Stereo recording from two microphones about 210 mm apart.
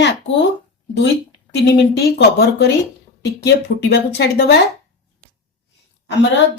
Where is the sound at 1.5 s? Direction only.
50° left (ahead or behind).